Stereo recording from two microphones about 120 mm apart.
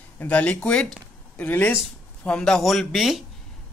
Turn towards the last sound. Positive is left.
turn(degrees=0)  # may be behind; listen again after turning